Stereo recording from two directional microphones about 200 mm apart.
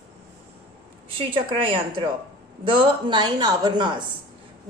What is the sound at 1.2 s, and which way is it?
Speech, 25° right (ahead or behind).